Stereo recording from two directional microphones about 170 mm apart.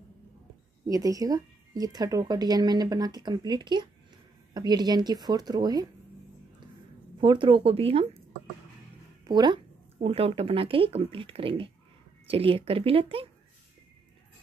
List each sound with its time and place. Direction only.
0.8 s speech: 20° right (ahead or behind)
7.2 s speech: 30° right (ahead or behind)
9.2 s speech: 25° right (ahead or behind)